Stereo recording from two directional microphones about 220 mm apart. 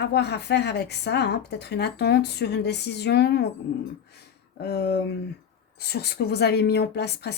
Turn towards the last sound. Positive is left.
turn(degrees=50)  # may be behind; listen again after turning